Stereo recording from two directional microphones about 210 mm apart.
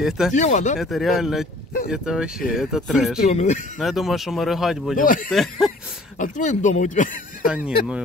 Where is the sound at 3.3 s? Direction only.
35° left (ahead or behind).